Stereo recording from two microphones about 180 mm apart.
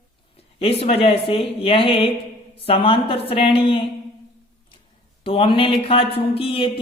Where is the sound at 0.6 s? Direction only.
35° left (ahead or behind).